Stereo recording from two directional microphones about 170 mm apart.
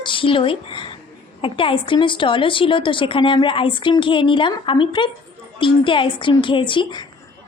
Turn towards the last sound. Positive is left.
turn(degrees=25)  # may be behind; listen again after turning